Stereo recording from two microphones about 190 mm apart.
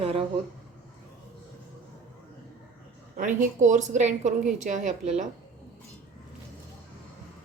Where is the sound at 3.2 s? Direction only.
40° right (ahead or behind).